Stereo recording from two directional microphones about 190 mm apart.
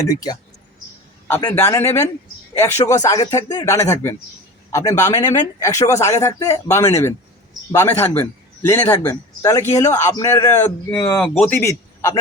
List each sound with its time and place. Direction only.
0.0 s speech: 20° left (ahead or behind)
1.5 s a man's voice: 15° left (ahead or behind)
11.6 s a sound: 15° left (ahead or behind)